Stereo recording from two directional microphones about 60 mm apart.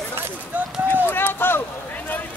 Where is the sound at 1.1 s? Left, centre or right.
Left.